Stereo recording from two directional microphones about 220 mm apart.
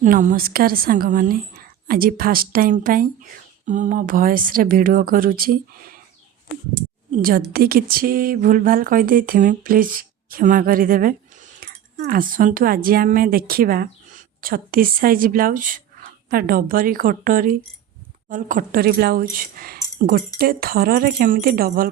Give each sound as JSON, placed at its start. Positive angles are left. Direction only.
{"t": 0.0, "sound": "speech", "side_deg": -35}
{"t": 7.1, "sound": "a woman's voice", "side_deg": -40}